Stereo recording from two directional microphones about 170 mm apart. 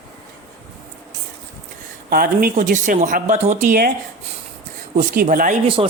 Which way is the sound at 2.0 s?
60° right (ahead or behind).